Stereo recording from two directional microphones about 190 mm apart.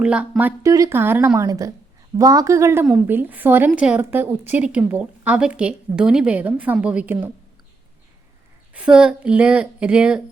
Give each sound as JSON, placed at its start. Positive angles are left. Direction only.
{"t": 0.0, "sound": "speech", "side_deg": -5}
{"t": 8.7, "sound": "speech", "side_deg": -5}